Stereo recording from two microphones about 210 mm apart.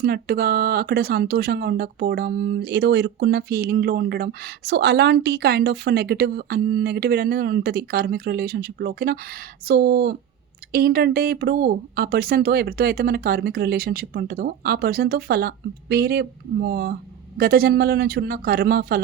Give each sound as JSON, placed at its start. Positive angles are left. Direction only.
{"t": 0.0, "sound": "speech", "side_deg": -45}